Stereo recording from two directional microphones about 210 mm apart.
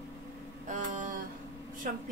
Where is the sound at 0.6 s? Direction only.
35° right (ahead or behind).